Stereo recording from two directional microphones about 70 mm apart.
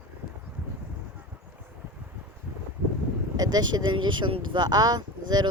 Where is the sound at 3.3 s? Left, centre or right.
Right.